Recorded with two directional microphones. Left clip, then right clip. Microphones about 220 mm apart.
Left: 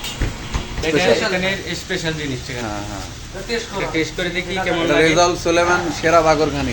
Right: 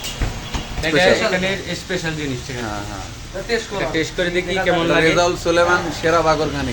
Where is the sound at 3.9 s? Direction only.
30° right (ahead or behind).